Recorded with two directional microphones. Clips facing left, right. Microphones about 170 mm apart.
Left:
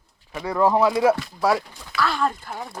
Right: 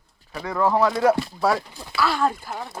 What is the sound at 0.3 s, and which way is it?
Speech, 10° left (ahead or behind).